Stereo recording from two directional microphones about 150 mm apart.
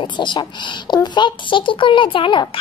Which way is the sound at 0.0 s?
30° left (ahead or behind).